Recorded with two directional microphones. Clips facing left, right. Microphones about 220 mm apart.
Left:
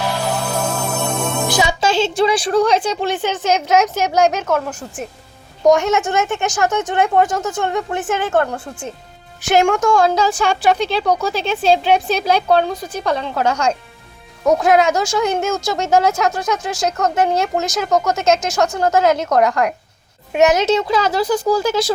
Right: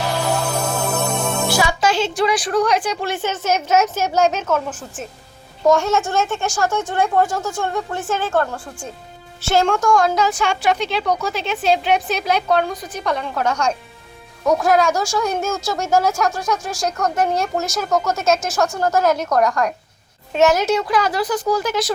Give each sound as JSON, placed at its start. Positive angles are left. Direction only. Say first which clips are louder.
{"t": 0.7, "sound": "music", "louder": "even", "side_deg": 0}
{"t": 1.5, "sound": "a woman's voice", "louder": "left 1 dB", "side_deg": 20}
{"t": 5.6, "sound": "a woman's voice", "louder": "left 3 dB", "side_deg": 20}